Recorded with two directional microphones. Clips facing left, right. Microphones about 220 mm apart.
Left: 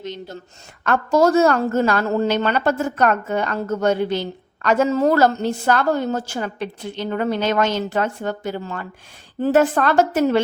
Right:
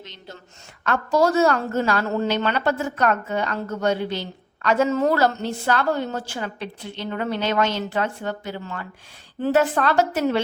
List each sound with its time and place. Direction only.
0.0 s a woman's voice: 45° left (ahead or behind)